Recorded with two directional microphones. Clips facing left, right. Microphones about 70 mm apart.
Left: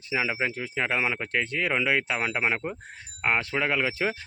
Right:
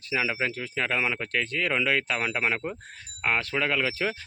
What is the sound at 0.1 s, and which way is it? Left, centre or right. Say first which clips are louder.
Speech: even; centre.